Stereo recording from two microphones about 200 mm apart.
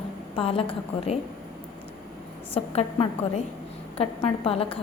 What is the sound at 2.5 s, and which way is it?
A woman's voice, 30° left (ahead or behind).